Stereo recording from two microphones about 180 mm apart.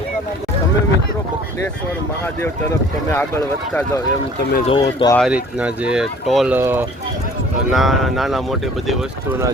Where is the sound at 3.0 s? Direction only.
15° left (ahead or behind).